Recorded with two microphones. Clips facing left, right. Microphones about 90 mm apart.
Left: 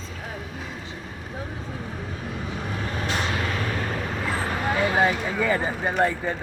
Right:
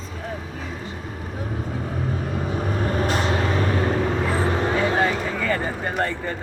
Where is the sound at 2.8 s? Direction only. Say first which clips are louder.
Right 5 dB; 40° right (ahead or behind).